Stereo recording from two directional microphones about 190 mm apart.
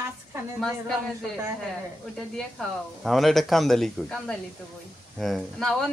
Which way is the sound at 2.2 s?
Centre (ahead or behind).